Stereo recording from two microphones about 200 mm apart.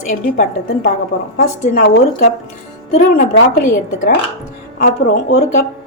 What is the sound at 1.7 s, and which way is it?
Speech, 55° left (ahead or behind).